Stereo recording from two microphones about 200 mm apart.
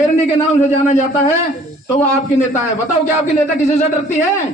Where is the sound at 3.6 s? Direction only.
30° left (ahead or behind).